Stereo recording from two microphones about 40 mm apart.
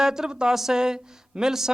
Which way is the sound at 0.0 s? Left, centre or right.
Centre.